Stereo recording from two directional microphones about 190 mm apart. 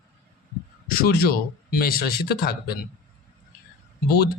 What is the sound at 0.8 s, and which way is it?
Speech, 50° left (ahead or behind).